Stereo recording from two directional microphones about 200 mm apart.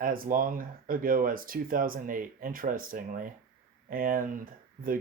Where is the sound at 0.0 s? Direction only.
45° right (ahead or behind).